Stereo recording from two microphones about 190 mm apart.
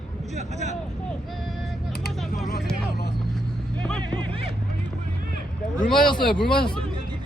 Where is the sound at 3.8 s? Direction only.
5° left (ahead or behind).